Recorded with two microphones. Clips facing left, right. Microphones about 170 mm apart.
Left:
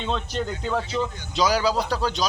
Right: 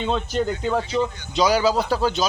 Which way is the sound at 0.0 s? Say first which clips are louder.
Right 4 dB; 5° right (ahead or behind).